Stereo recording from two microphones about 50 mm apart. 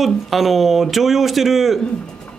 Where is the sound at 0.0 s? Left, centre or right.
Centre.